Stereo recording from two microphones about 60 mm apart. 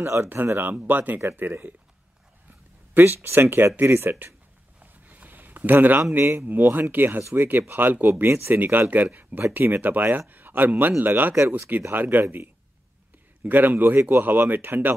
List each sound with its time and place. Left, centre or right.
0.0 s speech: right
0.7 s speech: right
2.9 s speech: right
4.7 s a sound: right
6.1 s a man's voice: right